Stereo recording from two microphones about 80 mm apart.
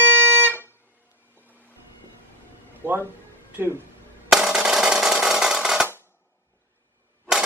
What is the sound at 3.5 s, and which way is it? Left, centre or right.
Speech, right.